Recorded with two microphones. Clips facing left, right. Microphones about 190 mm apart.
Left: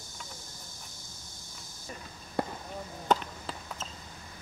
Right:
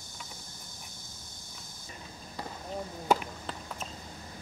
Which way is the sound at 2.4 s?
55° left (ahead or behind).